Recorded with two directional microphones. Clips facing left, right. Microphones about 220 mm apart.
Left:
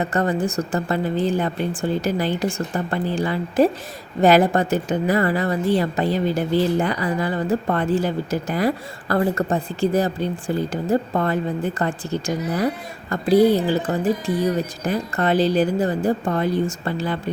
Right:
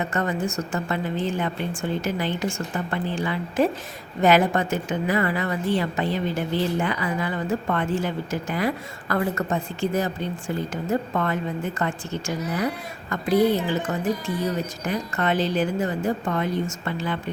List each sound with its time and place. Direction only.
0.0 s a woman's voice: 35° left (ahead or behind)